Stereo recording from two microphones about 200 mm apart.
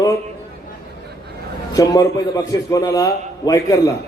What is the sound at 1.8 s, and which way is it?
A man's voice, 15° left (ahead or behind).